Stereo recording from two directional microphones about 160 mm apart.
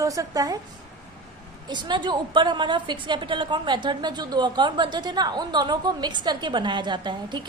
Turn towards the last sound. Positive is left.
turn(degrees=-30)  # may be behind; listen again after turning